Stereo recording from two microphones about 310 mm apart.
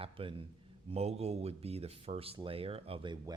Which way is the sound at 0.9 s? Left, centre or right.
Centre.